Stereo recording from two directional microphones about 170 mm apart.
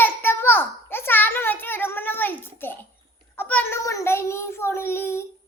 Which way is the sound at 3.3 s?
10° left (ahead or behind).